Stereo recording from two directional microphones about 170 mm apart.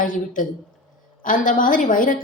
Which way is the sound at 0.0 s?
50° left (ahead or behind).